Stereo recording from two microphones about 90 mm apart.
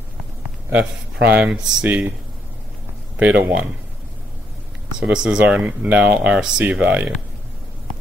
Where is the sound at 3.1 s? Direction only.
15° right (ahead or behind).